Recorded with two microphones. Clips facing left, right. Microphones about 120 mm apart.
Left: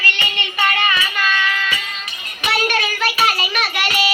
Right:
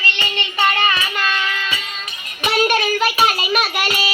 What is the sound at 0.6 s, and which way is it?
Child singing, 20° right (ahead or behind).